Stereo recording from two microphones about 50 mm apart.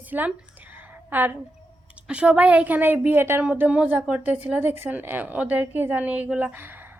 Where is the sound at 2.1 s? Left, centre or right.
Right.